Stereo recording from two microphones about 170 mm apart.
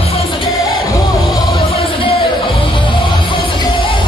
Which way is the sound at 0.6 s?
20° left (ahead or behind).